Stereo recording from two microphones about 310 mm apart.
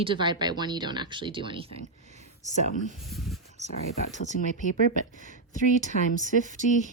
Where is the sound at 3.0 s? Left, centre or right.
Centre.